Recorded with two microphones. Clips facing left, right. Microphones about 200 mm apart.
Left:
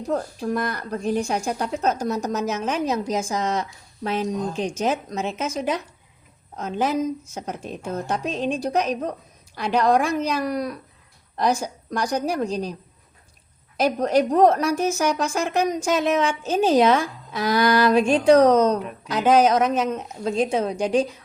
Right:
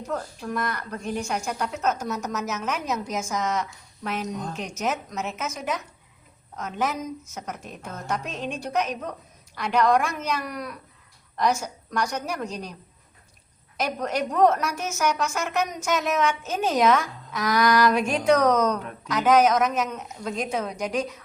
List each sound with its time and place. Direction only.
0.1 s a woman's voice: 35° left (ahead or behind)
13.7 s a woman's voice: 30° left (ahead or behind)